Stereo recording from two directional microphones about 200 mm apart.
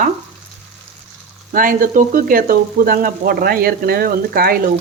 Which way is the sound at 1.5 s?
45° right (ahead or behind).